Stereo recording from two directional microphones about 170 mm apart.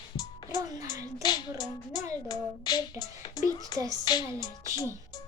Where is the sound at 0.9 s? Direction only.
25° left (ahead or behind).